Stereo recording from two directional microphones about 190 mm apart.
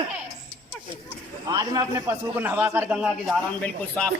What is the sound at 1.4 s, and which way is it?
A man's voice, 20° right (ahead or behind).